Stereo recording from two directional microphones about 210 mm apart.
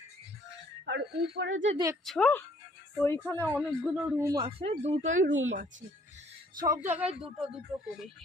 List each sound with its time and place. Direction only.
0.9 s speech: 55° right (ahead or behind)
2.0 s a woman's voice: 5° left (ahead or behind)
3.6 s speech: centre (ahead or behind)
4.3 s speech: 20° right (ahead or behind)
5.1 s speech: 65° right (ahead or behind)
6.6 s a woman's voice: 15° right (ahead or behind)